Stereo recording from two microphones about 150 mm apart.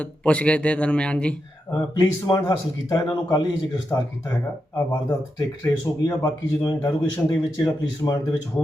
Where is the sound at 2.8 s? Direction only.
30° left (ahead or behind).